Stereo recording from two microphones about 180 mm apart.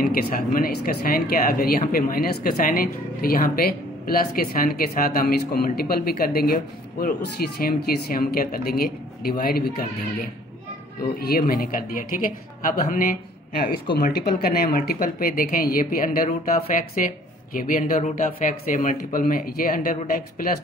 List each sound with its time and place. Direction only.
0.0 s speech: 55° left (ahead or behind)
11.1 s speech: 55° left (ahead or behind)